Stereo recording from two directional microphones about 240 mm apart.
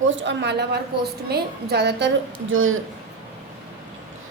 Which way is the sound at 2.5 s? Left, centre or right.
Right.